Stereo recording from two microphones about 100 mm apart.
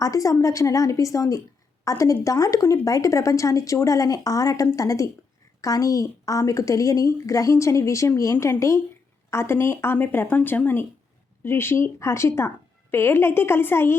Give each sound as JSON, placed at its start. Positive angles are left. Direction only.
{"t": 0.0, "sound": "a woman's voice", "side_deg": 35}